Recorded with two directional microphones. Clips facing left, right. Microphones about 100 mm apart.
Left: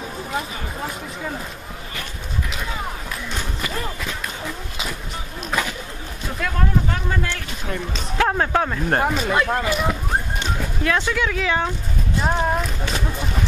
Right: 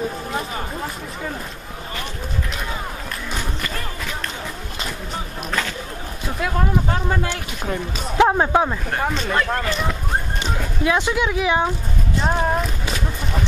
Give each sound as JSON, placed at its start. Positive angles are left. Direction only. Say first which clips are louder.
{"t": 6.9, "sound": "speech", "louder": "right 3 dB", "side_deg": -20}
{"t": 9.0, "sound": "speech", "louder": "left 1 dB", "side_deg": 5}
{"t": 10.8, "sound": "speech", "louder": "right 2 dB", "side_deg": -15}
{"t": 12.2, "sound": "speech", "louder": "right 1 dB", "side_deg": 0}